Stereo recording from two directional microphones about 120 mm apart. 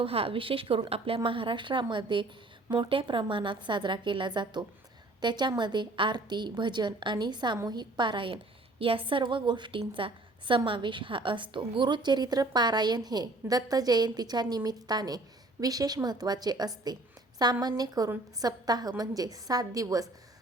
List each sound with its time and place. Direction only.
0.0 s a woman's voice: 50° right (ahead or behind); by 20.1 s 30° right (ahead or behind)